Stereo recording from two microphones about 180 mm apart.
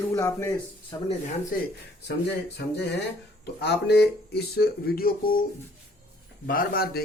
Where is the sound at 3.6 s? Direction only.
70° left (ahead or behind).